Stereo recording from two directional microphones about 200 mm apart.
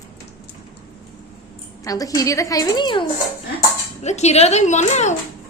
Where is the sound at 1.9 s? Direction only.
15° left (ahead or behind).